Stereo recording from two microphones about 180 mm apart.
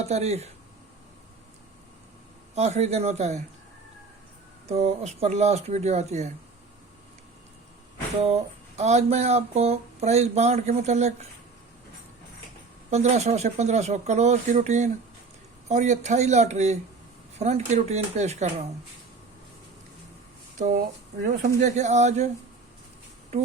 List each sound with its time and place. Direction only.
0.0 s speech: 35° right (ahead or behind)
2.6 s speech: 40° right (ahead or behind)
4.7 s speech: 35° right (ahead or behind)
8.8 s speech: 40° right (ahead or behind)
12.9 s speech: 40° right (ahead or behind)
20.6 s speech: 45° right (ahead or behind)